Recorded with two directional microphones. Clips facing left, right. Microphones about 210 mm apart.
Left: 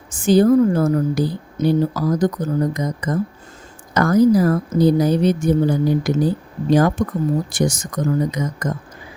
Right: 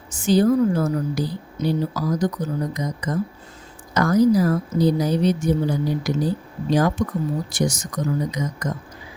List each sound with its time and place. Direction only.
0.1 s a woman's voice: 50° left (ahead or behind)